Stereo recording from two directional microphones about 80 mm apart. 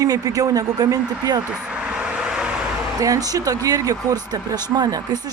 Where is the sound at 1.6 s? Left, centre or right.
Centre.